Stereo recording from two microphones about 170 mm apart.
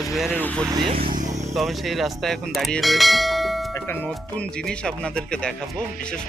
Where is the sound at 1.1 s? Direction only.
50° right (ahead or behind).